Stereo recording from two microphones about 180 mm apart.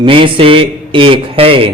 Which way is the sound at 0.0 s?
30° right (ahead or behind).